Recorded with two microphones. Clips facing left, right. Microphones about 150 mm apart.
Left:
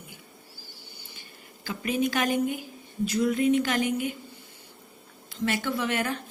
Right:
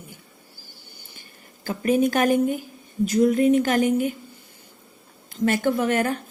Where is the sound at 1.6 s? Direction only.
45° right (ahead or behind).